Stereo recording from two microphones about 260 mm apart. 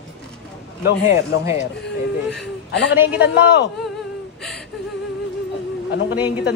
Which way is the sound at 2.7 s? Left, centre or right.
Left.